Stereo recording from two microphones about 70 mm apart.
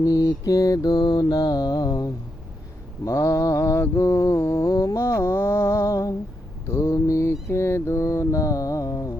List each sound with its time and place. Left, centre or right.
0.0 s mantra: left
3.0 s mantra: left